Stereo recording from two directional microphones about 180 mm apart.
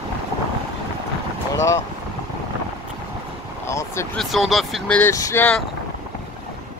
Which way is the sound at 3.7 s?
15° left (ahead or behind).